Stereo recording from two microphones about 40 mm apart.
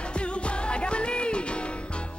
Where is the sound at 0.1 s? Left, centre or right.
Left.